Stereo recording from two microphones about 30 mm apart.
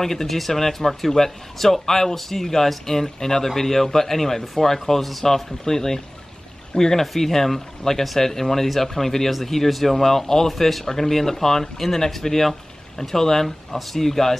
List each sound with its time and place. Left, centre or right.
0.0 s speech: centre